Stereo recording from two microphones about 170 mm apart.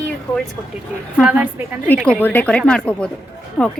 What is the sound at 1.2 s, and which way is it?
Speech, 10° right (ahead or behind).